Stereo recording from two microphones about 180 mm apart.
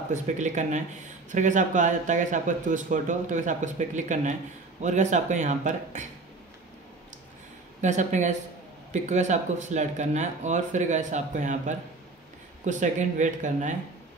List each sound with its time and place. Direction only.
0.1 s speech: 40° right (ahead or behind)
7.8 s speech: 40° right (ahead or behind)